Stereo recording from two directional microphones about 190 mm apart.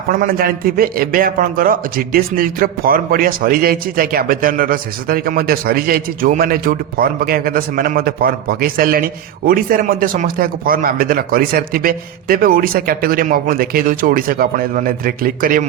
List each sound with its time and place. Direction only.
0.1 s a man's voice: 50° right (ahead or behind)